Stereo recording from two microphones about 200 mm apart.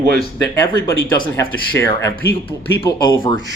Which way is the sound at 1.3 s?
10° left (ahead or behind).